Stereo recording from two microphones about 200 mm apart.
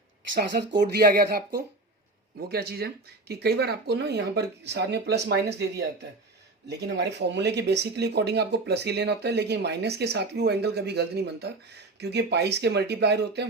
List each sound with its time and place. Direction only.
0.3 s speech: 55° right (ahead or behind)
2.5 s speech: 50° right (ahead or behind)